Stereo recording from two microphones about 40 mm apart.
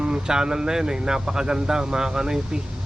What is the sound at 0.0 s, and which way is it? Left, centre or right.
Speech, centre.